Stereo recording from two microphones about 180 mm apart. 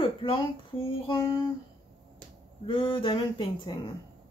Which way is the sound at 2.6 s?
30° left (ahead or behind).